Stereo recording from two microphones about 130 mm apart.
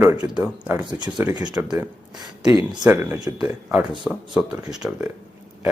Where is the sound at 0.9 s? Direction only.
35° right (ahead or behind).